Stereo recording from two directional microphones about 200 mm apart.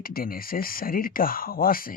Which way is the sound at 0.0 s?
45° left (ahead or behind).